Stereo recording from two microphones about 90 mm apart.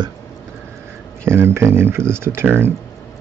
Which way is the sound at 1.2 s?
25° right (ahead or behind).